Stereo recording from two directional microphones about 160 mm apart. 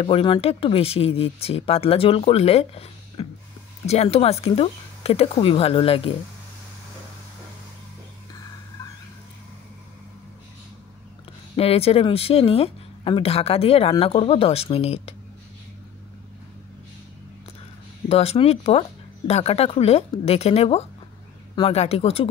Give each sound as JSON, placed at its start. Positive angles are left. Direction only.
{"t": 0.0, "sound": "speech", "side_deg": 30}
{"t": 11.5, "sound": "speech", "side_deg": 40}
{"t": 18.0, "sound": "speech", "side_deg": 40}